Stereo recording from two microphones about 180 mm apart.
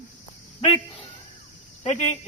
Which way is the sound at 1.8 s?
40° left (ahead or behind).